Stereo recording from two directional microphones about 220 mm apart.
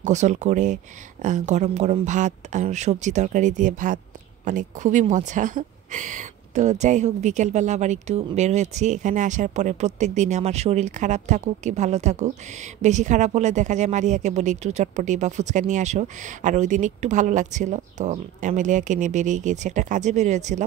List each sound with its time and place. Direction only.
0.0 s speech: 35° right (ahead or behind)